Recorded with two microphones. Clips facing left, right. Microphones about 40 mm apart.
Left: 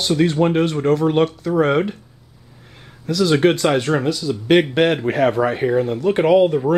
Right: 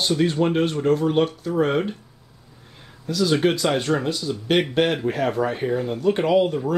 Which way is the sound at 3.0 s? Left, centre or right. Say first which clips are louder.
Left 4 dB; left.